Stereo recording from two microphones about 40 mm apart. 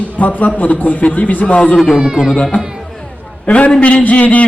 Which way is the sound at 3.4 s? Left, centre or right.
Left.